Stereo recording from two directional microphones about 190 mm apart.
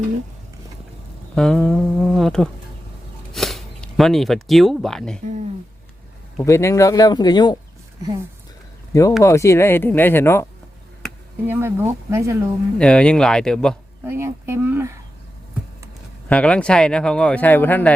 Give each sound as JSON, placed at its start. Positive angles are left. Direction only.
{"t": 1.4, "sound": "speech", "side_deg": 0}
{"t": 6.4, "sound": "speech", "side_deg": 15}
{"t": 8.9, "sound": "speech", "side_deg": 15}
{"t": 11.4, "sound": "speech", "side_deg": -10}
{"t": 12.8, "sound": "speech", "side_deg": 5}
{"t": 14.0, "sound": "a sound", "side_deg": -15}
{"t": 16.3, "sound": "speech", "side_deg": 5}